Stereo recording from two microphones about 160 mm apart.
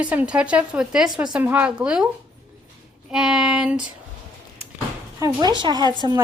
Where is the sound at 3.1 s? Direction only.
5° right (ahead or behind).